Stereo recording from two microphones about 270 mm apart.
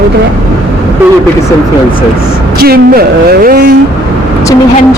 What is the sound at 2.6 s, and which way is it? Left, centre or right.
Speech, right.